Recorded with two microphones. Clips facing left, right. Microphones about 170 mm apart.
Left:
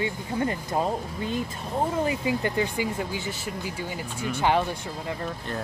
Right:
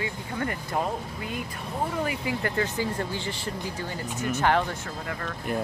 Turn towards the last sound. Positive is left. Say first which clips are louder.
# left 2 dB
turn(degrees=15)  # may be behind; listen again after turning